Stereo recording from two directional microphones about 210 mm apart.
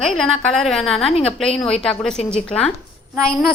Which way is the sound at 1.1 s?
30° left (ahead or behind).